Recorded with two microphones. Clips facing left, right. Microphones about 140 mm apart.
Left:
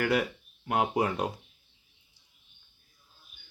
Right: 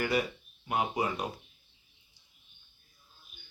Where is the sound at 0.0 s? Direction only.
65° left (ahead or behind).